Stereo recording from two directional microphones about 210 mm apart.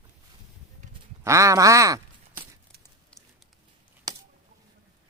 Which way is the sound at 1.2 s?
15° right (ahead or behind).